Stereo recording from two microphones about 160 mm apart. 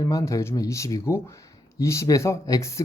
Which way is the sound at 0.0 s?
20° left (ahead or behind).